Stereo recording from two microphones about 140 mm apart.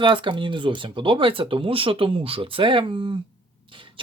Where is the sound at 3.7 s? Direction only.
35° right (ahead or behind).